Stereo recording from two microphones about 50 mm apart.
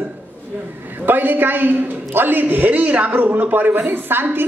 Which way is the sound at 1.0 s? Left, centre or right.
Right.